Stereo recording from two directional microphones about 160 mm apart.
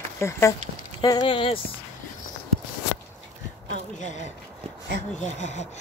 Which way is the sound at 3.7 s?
50° left (ahead or behind).